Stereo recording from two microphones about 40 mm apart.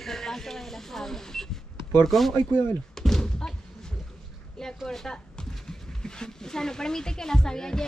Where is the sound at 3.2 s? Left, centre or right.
Centre.